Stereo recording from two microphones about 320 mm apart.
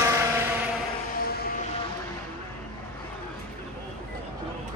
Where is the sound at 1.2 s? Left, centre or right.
Left.